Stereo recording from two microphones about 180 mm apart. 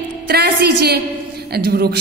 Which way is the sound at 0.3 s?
60° right (ahead or behind).